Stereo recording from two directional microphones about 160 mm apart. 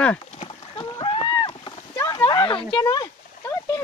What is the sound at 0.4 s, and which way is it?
Rowboat, 30° left (ahead or behind).